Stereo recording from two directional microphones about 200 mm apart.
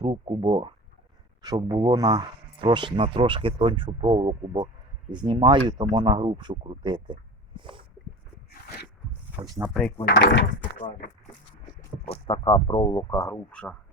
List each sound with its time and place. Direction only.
0.0 s speech: 25° right (ahead or behind)
9.3 s speech: 10° right (ahead or behind)
10.1 s speech: 60° left (ahead or behind)
12.0 s speech: 25° left (ahead or behind); by 13.7 s 5° left (ahead or behind)